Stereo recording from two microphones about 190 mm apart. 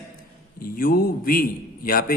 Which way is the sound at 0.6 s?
50° left (ahead or behind).